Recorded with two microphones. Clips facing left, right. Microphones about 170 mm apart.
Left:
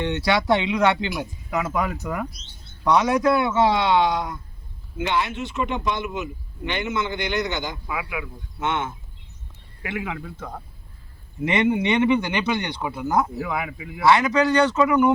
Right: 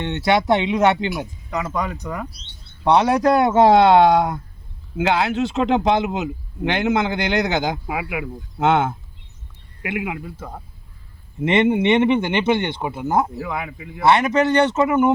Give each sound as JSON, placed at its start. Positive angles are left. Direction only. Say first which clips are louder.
{"t": 0.0, "sound": "speech", "louder": "right 3 dB", "side_deg": -20}
{"t": 1.5, "sound": "speech", "louder": "even", "side_deg": 5}
{"t": 2.3, "sound": "speech", "louder": "even", "side_deg": -30}
{"t": 4.9, "sound": "speech", "louder": "right 6 dB", "side_deg": -80}
{"t": 9.8, "sound": "speech", "louder": "right 4 dB", "side_deg": -15}
{"t": 11.4, "sound": "speech", "louder": "right 4 dB", "side_deg": -25}
{"t": 13.4, "sound": "speech", "louder": "even", "side_deg": 0}
{"t": 14.0, "sound": "speech", "louder": "right 2 dB", "side_deg": -25}